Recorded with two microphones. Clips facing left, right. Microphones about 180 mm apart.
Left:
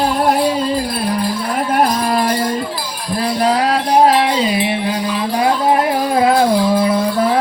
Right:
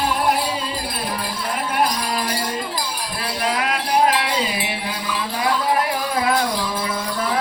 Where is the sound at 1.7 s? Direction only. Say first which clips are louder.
Left 7 dB; 50° left (ahead or behind).